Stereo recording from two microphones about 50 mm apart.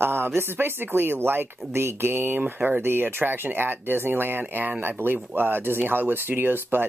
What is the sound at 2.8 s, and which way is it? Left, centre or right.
Speech, right.